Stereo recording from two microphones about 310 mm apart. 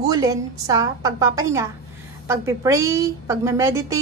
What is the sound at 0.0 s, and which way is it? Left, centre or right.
A woman's voice, centre.